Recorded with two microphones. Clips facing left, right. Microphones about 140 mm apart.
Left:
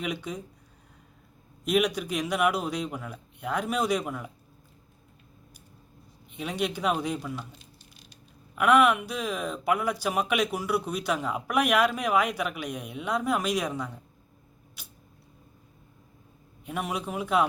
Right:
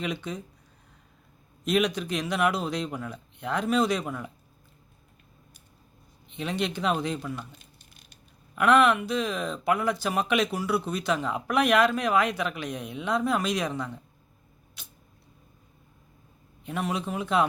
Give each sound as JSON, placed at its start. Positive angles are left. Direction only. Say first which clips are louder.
{"t": 0.0, "sound": "speech", "louder": "right 1 dB", "side_deg": 10}
{"t": 1.6, "sound": "speech", "louder": "even", "side_deg": 10}
{"t": 6.3, "sound": "speech", "louder": "right 1 dB", "side_deg": 10}
{"t": 7.6, "sound": "a sound", "louder": "left 3 dB", "side_deg": -50}
{"t": 8.5, "sound": "speech", "louder": "even", "side_deg": 10}
{"t": 14.8, "sound": "a sound", "louder": "even", "side_deg": 10}
{"t": 16.6, "sound": "speech", "louder": "right 2 dB", "side_deg": 10}